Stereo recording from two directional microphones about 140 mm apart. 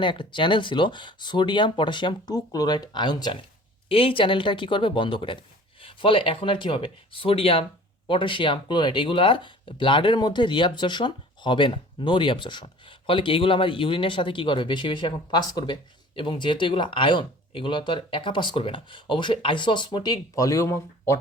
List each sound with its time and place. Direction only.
0.0 s speech: 35° left (ahead or behind)
3.8 s speech: 40° left (ahead or behind); by 21.2 s 20° left (ahead or behind)